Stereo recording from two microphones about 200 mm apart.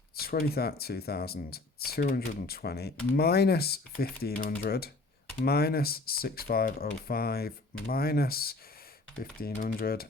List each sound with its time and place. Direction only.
0.2 s speech: 50° left (ahead or behind)